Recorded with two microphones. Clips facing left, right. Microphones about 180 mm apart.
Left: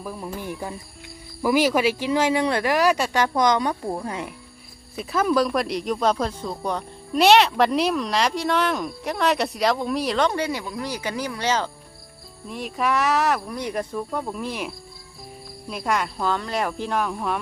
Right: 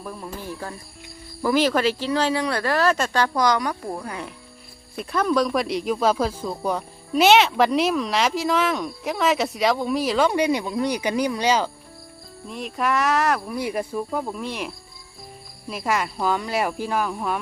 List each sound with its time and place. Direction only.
0.0 s speech: 10° left (ahead or behind)
4.9 s speech: centre (ahead or behind)
12.5 s speech: centre (ahead or behind)